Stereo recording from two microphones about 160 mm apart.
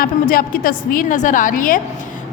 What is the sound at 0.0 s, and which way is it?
A woman's voice, 65° left (ahead or behind).